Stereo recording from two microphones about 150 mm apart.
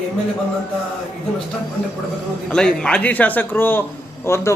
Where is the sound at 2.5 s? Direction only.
5° left (ahead or behind).